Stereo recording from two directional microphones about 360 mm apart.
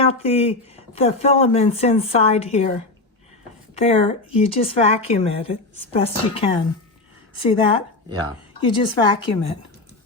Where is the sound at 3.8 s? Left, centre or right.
Centre.